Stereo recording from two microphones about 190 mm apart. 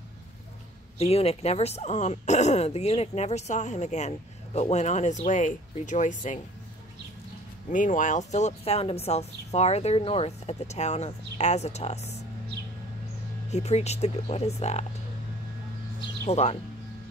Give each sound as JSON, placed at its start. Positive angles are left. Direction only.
{"t": 0.9, "sound": "speech", "side_deg": 30}
{"t": 7.7, "sound": "speech", "side_deg": 40}
{"t": 13.5, "sound": "speech", "side_deg": 35}
{"t": 16.3, "sound": "speech", "side_deg": 35}